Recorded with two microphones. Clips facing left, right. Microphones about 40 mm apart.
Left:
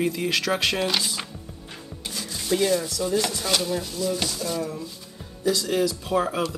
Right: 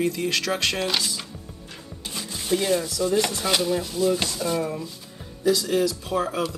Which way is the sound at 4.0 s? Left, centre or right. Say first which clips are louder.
Right 4 dB; centre.